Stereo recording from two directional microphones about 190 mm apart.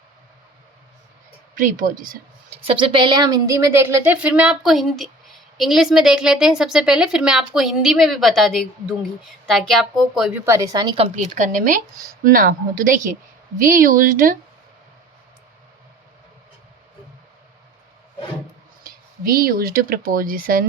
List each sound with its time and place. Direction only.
1.5 s speech: 45° right (ahead or behind)
2.6 s a woman's voice: 25° right (ahead or behind); by 10.4 s centre (ahead or behind)
10.4 s a woman's voice: 15° right (ahead or behind); by 14.3 s 45° right (ahead or behind)
19.2 s speech: 50° right (ahead or behind)